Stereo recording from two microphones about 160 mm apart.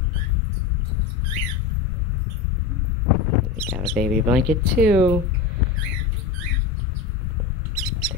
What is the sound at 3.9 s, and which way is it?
Speech, 5° right (ahead or behind).